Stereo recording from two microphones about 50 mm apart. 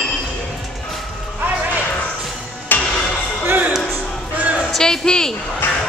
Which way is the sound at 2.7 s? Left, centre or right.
Left.